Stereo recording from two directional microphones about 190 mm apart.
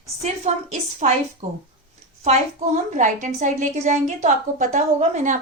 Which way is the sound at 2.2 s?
40° right (ahead or behind).